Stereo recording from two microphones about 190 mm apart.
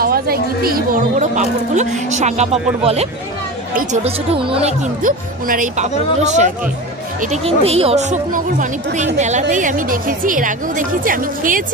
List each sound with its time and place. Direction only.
0.0 s a woman's voice: 50° right (ahead or behind); by 4.7 s 30° right (ahead or behind)
5.0 s a woman's voice: 45° right (ahead or behind)